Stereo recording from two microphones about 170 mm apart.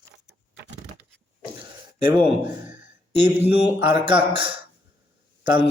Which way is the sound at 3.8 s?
30° right (ahead or behind).